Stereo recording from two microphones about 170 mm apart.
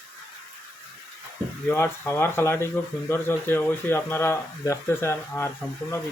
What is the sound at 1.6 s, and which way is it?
Speech, 15° left (ahead or behind).